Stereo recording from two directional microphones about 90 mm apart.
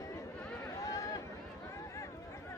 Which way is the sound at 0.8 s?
40° left (ahead or behind).